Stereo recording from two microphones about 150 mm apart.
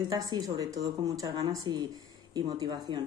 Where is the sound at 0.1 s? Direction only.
25° right (ahead or behind).